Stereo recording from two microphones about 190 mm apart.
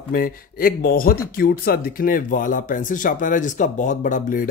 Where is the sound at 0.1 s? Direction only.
50° left (ahead or behind).